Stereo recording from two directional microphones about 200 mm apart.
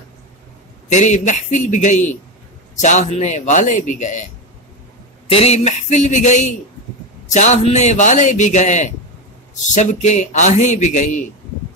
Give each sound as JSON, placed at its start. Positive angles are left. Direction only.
{"t": 0.9, "sound": "a man's voice", "side_deg": 35}
{"t": 5.3, "sound": "a man's voice", "side_deg": 30}